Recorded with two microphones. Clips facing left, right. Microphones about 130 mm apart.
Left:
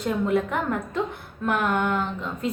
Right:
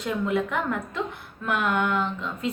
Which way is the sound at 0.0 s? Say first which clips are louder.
Left 2 dB; 45° left (ahead or behind).